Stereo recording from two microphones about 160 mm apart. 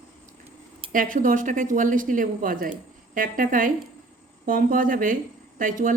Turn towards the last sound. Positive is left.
turn(degrees=-55)  # may be behind; listen again after turning